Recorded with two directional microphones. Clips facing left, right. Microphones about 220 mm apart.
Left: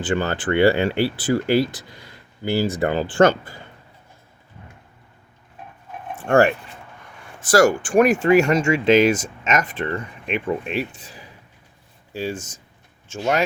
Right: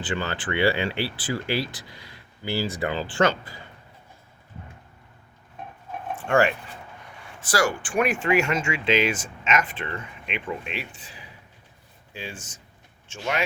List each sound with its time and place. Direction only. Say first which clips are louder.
0.0 s speech: left 7 dB; 45° left (ahead or behind)
6.2 s speech: left 5 dB; 45° left (ahead or behind)